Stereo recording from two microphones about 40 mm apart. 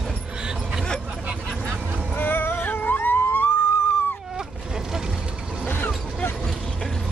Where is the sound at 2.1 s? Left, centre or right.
Left.